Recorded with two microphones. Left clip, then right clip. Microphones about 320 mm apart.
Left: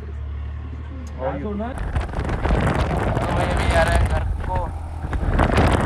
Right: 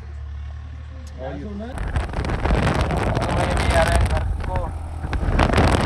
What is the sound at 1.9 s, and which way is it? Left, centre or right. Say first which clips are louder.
Vehicle: even; centre.